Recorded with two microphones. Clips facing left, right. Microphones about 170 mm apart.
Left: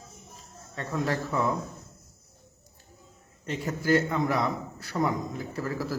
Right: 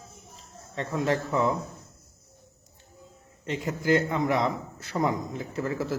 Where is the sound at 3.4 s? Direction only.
20° right (ahead or behind).